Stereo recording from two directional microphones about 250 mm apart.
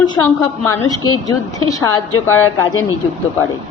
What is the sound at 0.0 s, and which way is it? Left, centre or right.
A woman's voice, centre.